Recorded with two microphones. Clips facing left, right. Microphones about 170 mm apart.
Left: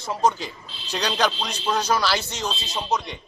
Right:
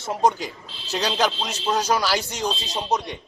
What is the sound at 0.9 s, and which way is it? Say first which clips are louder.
A man's voice: right 1 dB; 5° right (ahead or behind).